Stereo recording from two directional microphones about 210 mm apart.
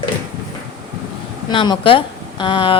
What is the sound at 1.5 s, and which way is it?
Speech, 25° left (ahead or behind).